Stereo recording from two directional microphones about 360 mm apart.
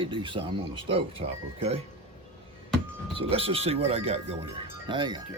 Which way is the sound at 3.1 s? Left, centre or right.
Centre.